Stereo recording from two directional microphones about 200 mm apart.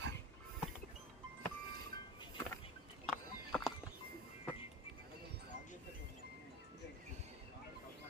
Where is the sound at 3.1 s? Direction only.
5° left (ahead or behind).